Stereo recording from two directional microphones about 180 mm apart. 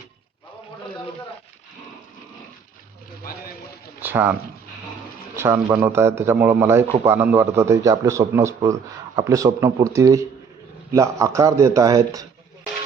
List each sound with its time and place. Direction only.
4.0 s speech: 10° right (ahead or behind)
5.4 s speech: 15° right (ahead or behind)